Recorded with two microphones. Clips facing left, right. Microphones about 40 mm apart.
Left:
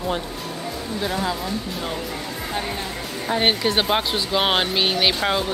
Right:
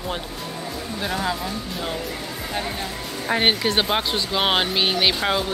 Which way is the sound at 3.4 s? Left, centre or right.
Centre.